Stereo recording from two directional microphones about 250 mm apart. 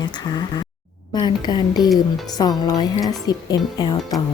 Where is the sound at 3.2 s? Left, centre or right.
Centre.